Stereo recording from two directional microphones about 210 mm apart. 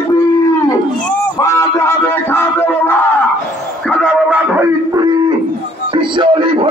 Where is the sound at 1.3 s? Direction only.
15° left (ahead or behind).